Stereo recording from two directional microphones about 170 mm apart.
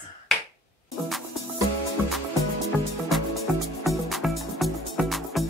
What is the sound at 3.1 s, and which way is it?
Music, centre (ahead or behind).